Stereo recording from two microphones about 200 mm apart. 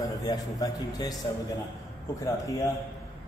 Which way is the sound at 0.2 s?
20° left (ahead or behind).